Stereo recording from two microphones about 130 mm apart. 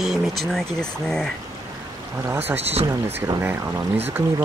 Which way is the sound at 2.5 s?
50° right (ahead or behind).